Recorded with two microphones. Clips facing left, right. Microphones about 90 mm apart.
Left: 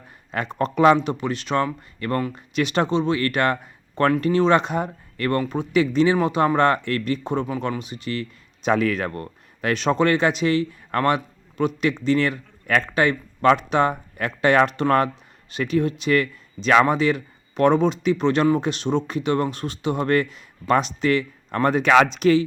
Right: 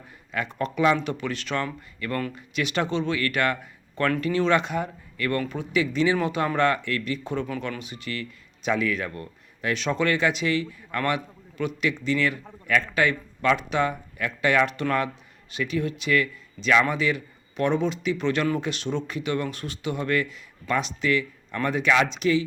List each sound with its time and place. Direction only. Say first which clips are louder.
0.3 s speech: left 4 dB; 35° left (ahead or behind)
0.9 s speech: left 4 dB; 20° left (ahead or behind)
2.3 s speech: left 5 dB; 30° left (ahead or behind); by 9.7 s 55° left (ahead or behind)
9.7 s speech: left 5 dB; 35° left (ahead or behind)